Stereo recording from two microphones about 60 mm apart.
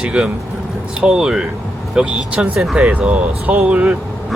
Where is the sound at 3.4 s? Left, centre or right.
Right.